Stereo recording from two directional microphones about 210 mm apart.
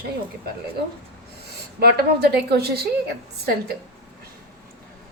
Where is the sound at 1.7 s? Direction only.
50° right (ahead or behind).